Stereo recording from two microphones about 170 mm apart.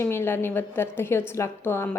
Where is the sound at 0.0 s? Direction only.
15° left (ahead or behind).